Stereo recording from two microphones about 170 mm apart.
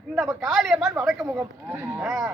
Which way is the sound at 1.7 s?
15° right (ahead or behind).